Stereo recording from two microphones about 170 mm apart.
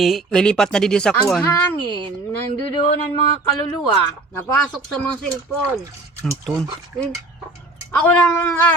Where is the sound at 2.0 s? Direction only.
30° right (ahead or behind).